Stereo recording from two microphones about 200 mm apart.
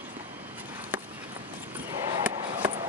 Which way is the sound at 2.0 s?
20° right (ahead or behind).